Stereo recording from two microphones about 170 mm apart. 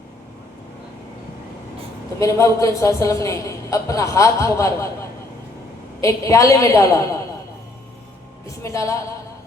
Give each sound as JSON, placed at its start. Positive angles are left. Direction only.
{"t": 2.1, "sound": "a man's voice", "side_deg": 20}
{"t": 6.0, "sound": "a man's voice", "side_deg": 15}
{"t": 8.4, "sound": "a man's voice", "side_deg": 15}